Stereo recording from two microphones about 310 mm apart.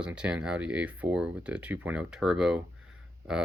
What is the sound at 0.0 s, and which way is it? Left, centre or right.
Speech, centre.